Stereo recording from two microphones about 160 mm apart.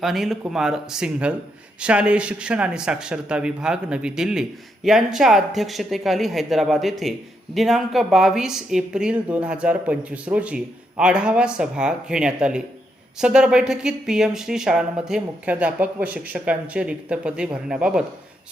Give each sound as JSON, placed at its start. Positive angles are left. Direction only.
{"t": 0.0, "sound": "speech", "side_deg": 0}